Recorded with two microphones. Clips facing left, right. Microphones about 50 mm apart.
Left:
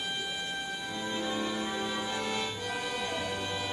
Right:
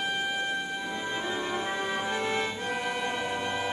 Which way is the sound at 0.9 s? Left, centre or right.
Right.